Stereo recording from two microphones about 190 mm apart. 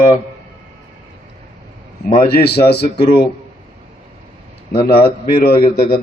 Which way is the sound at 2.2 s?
55° left (ahead or behind).